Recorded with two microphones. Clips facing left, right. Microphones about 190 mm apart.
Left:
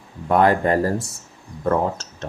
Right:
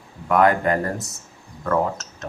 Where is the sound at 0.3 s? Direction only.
30° left (ahead or behind).